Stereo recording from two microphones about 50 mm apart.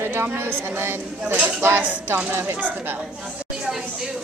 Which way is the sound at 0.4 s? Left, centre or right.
Right.